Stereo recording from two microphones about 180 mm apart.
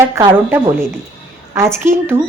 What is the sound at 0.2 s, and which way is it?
Speech, 15° right (ahead or behind).